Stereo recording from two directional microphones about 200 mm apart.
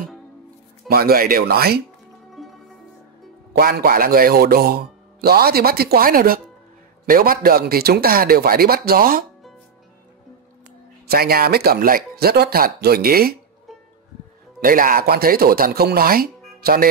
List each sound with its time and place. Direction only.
0.8 s speech: 50° right (ahead or behind)
2.4 s music: centre (ahead or behind)
3.5 s speech: 50° right (ahead or behind)
11.1 s speech: 50° right (ahead or behind)
14.6 s speech: 45° right (ahead or behind)